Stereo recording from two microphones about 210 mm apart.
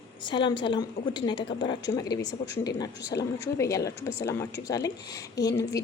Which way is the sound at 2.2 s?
55° left (ahead or behind).